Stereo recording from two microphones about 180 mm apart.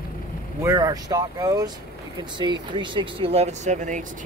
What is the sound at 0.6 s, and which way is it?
Speech, 20° right (ahead or behind).